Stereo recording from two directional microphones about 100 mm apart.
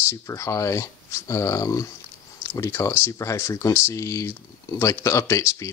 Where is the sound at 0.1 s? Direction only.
30° left (ahead or behind).